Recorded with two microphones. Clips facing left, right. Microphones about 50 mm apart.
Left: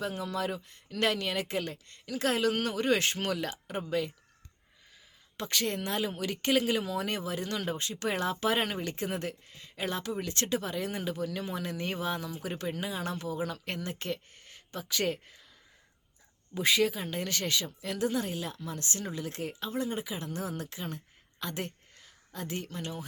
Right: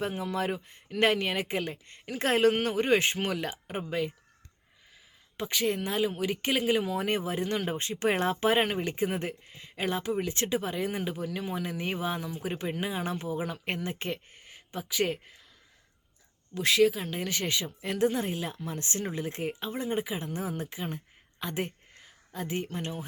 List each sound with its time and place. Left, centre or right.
0.0 s speech: right
2.0 s speech: right; by 4.1 s centre
5.4 s speech: centre
16.6 s speech: centre; by 23.0 s right